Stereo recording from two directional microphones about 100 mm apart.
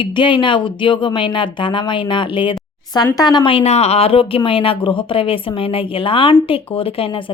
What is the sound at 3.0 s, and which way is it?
A woman's voice, 40° left (ahead or behind).